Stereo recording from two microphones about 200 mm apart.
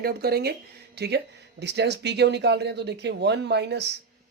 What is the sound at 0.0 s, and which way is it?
Speech, 50° right (ahead or behind).